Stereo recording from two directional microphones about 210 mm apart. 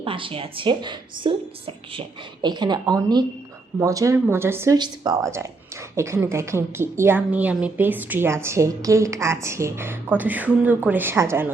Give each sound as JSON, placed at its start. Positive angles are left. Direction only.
{"t": 0.0, "sound": "a woman's voice", "side_deg": -25}